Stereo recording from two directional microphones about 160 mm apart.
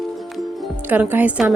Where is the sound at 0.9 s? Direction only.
10° right (ahead or behind).